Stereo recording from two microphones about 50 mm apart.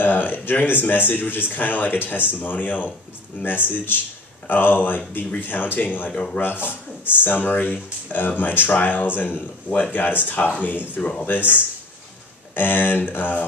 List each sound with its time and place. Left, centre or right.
0.0 s speech: left
11.0 s speech: left
11.2 s speech: left